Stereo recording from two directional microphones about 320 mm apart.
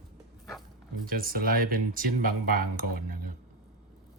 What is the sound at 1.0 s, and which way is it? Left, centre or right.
Speech, right.